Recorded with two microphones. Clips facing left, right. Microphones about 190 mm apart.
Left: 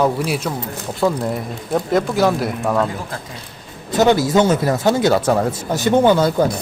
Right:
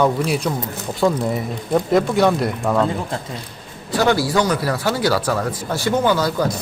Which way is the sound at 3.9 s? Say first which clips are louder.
Left 3 dB; 20° left (ahead or behind).